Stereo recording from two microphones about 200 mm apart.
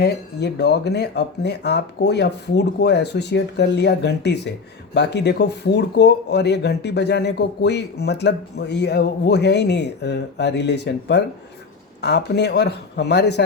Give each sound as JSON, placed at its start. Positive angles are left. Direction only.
{"t": 0.0, "sound": "speech", "side_deg": 55}